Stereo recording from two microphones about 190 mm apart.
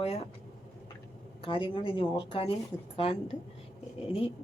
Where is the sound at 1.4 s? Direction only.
30° left (ahead or behind).